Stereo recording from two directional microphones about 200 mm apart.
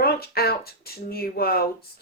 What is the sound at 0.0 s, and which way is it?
Speech, 50° left (ahead or behind).